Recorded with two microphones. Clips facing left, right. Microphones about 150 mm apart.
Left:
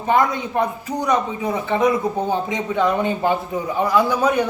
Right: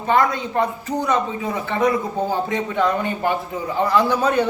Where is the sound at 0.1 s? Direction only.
20° left (ahead or behind).